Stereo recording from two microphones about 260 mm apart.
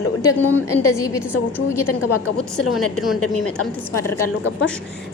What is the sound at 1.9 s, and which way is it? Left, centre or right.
Speech, left.